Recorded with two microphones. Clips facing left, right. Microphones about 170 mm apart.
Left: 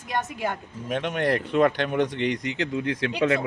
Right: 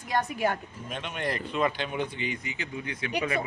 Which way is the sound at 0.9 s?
65° left (ahead or behind).